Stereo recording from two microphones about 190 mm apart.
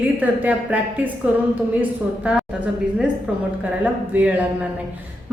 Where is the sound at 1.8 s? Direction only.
5° right (ahead or behind).